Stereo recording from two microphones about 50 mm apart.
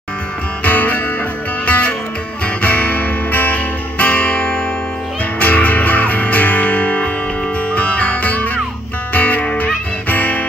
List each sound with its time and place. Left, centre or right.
0.7 s music: left
10.0 s guitar: left